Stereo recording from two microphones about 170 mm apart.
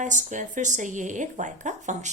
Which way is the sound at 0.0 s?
45° right (ahead or behind).